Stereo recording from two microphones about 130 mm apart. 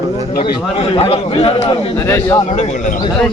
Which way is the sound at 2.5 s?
65° left (ahead or behind).